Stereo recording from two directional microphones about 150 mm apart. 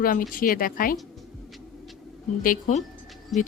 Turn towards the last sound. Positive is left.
turn(degrees=0)  # may be behind; listen again after turning